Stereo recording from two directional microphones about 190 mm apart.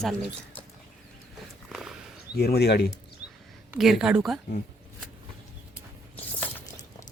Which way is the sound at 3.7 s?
Centre (ahead or behind).